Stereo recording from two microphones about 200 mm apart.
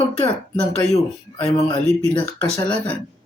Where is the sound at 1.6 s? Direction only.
20° left (ahead or behind).